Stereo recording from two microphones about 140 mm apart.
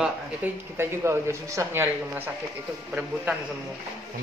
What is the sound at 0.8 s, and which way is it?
A man's voice, 20° right (ahead or behind).